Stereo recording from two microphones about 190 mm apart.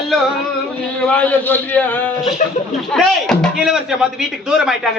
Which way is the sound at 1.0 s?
5° left (ahead or behind).